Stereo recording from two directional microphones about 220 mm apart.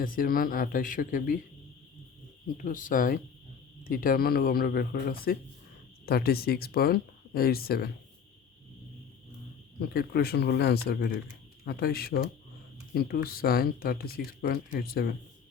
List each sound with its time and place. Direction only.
0.0 s speech: 40° left (ahead or behind)
2.6 s speech: 40° left (ahead or behind)
9.8 s speech: 45° left (ahead or behind)